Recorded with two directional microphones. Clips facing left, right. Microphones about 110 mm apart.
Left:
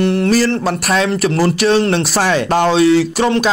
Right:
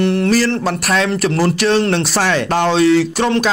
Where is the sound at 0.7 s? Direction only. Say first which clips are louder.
Left 1 dB; 15° left (ahead or behind).